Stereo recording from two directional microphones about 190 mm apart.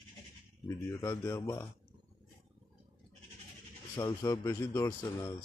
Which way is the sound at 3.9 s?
20° left (ahead or behind).